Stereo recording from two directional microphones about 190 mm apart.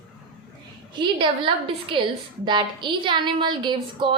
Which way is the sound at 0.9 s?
25° right (ahead or behind).